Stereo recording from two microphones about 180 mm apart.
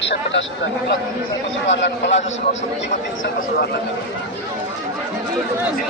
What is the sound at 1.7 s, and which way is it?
Speech, 85° left.